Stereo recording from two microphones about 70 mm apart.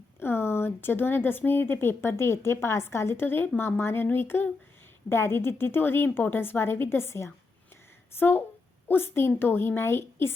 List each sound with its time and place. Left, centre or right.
0.2 s speech: left